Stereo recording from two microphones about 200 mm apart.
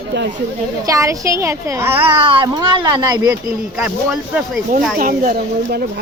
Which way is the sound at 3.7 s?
5° right (ahead or behind).